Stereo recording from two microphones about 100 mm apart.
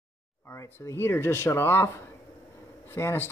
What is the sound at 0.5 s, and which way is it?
Speech, 25° left (ahead or behind).